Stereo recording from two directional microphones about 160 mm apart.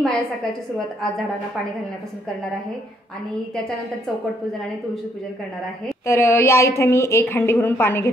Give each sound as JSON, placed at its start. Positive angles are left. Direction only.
{"t": 0.0, "sound": "a woman's voice", "side_deg": 0}
{"t": 6.0, "sound": "a woman's voice", "side_deg": 15}